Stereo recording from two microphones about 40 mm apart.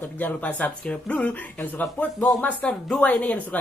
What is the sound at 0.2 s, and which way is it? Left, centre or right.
Speech, left.